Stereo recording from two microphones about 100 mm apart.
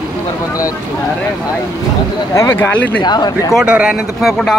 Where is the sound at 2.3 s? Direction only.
25° left (ahead or behind).